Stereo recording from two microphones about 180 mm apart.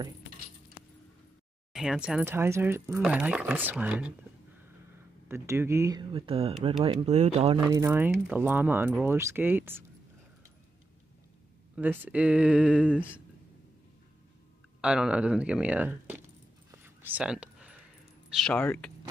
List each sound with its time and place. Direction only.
1.7 s speech: 5° right (ahead or behind)
5.3 s speech: 15° right (ahead or behind)
6.1 s speech: 30° right (ahead or behind)
7.1 s speech: 35° right (ahead or behind)
7.7 s speech: 15° right (ahead or behind)
11.7 s speech: 10° right (ahead or behind)
14.8 s speech: 5° right (ahead or behind)
16.7 s a sound: 10° right (ahead or behind)
18.4 s speech: 10° left (ahead or behind)